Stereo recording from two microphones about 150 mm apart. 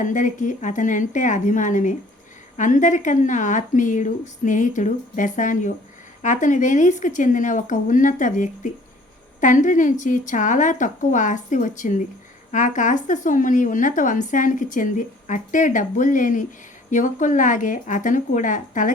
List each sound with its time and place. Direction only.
0.0 s a woman's voice: 55° left (ahead or behind)